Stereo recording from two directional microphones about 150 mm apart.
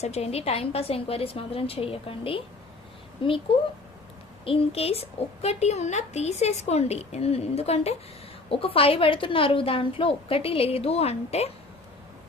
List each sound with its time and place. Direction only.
0.0 s a woman's voice: 45° left (ahead or behind)
4.4 s a woman's voice: 40° left (ahead or behind)